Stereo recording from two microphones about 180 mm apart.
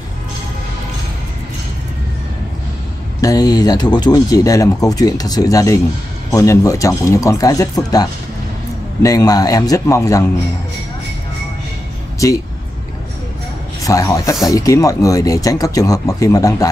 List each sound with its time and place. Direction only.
3.2 s speech: 20° left (ahead or behind)
12.2 s speech: 20° left (ahead or behind)
13.8 s speech: 20° left (ahead or behind)